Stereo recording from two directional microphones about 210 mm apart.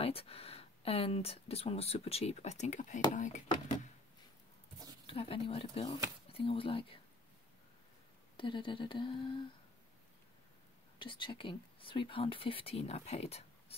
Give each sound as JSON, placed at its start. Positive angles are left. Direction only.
{"t": 0.0, "sound": "speech", "side_deg": 30}
{"t": 5.0, "sound": "speech", "side_deg": 25}
{"t": 8.4, "sound": "speech", "side_deg": 25}
{"t": 11.0, "sound": "speech", "side_deg": 25}